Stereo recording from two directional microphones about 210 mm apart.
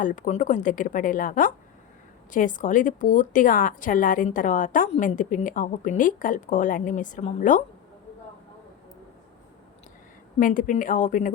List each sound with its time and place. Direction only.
0.0 s a woman's voice: 40° left (ahead or behind)
10.4 s a woman's voice: 40° left (ahead or behind)